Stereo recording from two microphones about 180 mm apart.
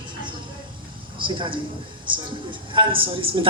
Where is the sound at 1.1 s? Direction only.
25° right (ahead or behind).